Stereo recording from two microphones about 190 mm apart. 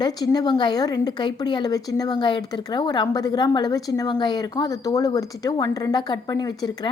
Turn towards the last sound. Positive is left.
turn(degrees=20)  # may be behind; listen again after turning